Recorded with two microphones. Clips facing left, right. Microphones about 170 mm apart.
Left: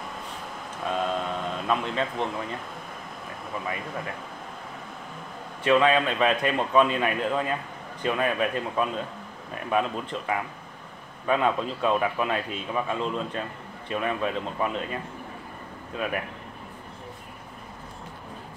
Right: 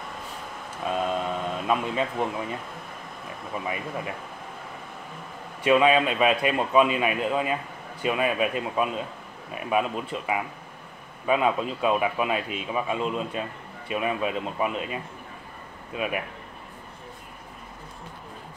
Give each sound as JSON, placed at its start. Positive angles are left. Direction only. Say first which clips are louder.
{"t": 0.8, "sound": "a sound", "louder": "right 1 dB", "side_deg": -5}
{"t": 3.6, "sound": "speech", "louder": "right 2 dB", "side_deg": -15}
{"t": 5.6, "sound": "speech", "louder": "right 1 dB", "side_deg": -15}